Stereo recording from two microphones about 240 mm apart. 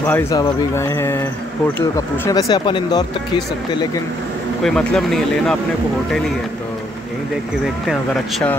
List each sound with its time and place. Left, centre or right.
0.0 s speech: centre
4.6 s speech: centre
7.8 s speech: centre